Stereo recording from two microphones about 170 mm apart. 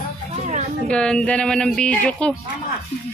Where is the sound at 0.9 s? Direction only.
5° left (ahead or behind).